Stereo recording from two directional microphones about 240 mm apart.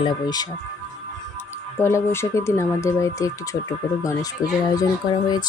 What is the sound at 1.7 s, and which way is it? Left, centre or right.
Speech, centre.